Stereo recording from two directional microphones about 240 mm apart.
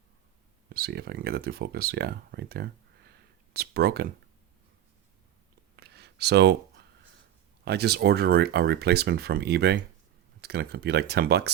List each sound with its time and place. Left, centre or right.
0.7 s speech: right
5.7 s a sound: right
7.6 s speech: right